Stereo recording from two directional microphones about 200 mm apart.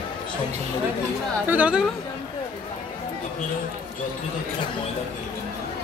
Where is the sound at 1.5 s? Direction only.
5° right (ahead or behind).